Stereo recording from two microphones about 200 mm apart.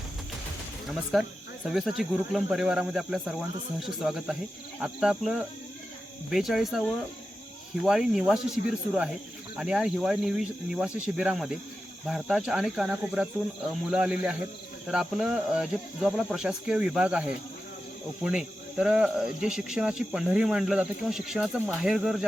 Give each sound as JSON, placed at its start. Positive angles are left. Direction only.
{"t": 1.1, "sound": "speech", "side_deg": 0}